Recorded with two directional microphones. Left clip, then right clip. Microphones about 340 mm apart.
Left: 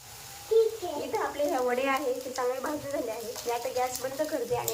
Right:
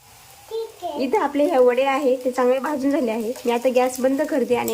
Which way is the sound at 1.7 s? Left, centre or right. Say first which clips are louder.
Right 8 dB; right.